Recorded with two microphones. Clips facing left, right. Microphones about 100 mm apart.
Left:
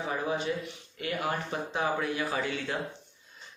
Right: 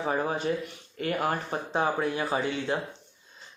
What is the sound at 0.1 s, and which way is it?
A man's voice, 45° right (ahead or behind).